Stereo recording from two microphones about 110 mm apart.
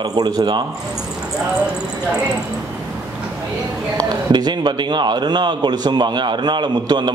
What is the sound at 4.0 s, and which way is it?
A man's voice, 40° right (ahead or behind).